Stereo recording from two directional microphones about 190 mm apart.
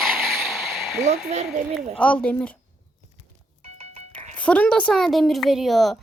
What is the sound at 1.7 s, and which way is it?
Speech, 5° left (ahead or behind).